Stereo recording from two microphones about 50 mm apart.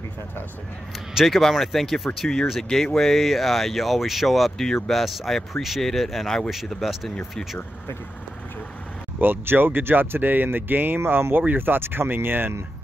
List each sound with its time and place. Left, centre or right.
1.1 s speech: centre
9.2 s speech: right